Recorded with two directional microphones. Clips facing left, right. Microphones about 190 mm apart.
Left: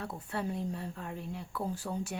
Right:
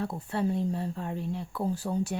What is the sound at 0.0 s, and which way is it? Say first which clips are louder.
Speech: right 7 dB; 30° right (ahead or behind).